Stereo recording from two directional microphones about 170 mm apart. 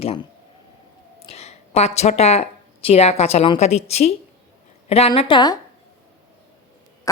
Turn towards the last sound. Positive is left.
turn(degrees=30)  # may be behind; listen again after turning